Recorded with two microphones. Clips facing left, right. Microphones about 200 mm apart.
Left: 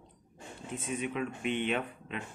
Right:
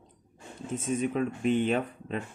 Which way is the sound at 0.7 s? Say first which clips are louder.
Right 6 dB; 40° right (ahead or behind).